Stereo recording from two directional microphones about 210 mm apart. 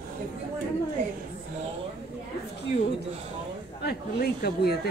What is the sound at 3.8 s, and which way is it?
Speech, 50° left (ahead or behind).